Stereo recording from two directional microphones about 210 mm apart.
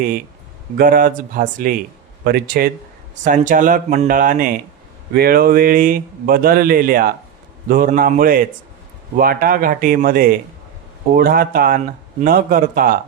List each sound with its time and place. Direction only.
0.8 s speech: 40° right (ahead or behind)